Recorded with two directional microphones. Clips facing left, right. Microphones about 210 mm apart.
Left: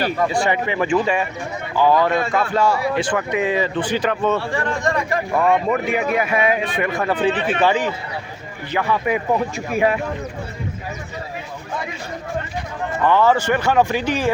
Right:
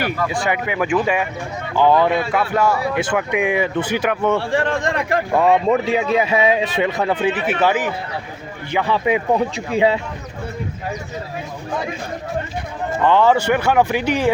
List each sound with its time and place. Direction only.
0.3 s speech: 5° right (ahead or behind)
1.7 s a man's voice: 20° right (ahead or behind)
2.3 s speech: 10° right (ahead or behind)
4.5 s speech: 60° right (ahead or behind)
5.4 s a man's voice: 25° right (ahead or behind); by 7.9 s 5° right (ahead or behind)
8.9 s a man's voice: 20° right (ahead or behind)
13.1 s speech: 20° right (ahead or behind)